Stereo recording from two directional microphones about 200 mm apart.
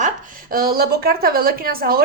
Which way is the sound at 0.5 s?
50° right (ahead or behind).